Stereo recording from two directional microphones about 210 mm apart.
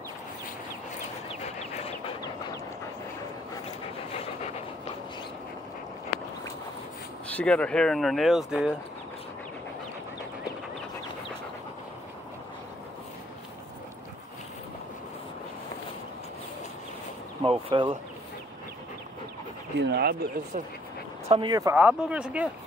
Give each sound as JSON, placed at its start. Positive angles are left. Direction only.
{"t": 1.4, "sound": "chicken", "side_deg": 30}
{"t": 7.2, "sound": "speech", "side_deg": 5}
{"t": 17.4, "sound": "a sound", "side_deg": -25}
{"t": 19.8, "sound": "a sound", "side_deg": -50}
{"t": 21.3, "sound": "speech", "side_deg": -20}
{"t": 21.7, "sound": "speech", "side_deg": -5}